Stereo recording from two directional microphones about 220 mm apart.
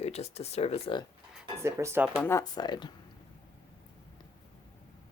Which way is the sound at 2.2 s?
15° left (ahead or behind).